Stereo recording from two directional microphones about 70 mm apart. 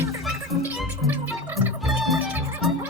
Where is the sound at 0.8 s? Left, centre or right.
Right.